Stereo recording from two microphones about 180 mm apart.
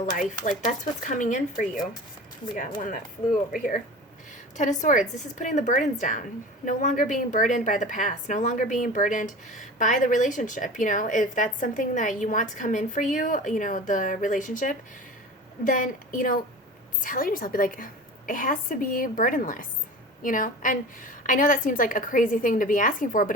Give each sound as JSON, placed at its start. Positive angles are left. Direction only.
{"t": 0.0, "sound": "speech", "side_deg": 45}
{"t": 4.5, "sound": "speech", "side_deg": 40}